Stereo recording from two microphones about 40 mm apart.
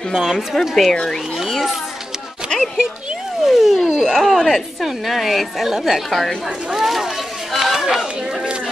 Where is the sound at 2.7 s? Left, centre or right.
Centre.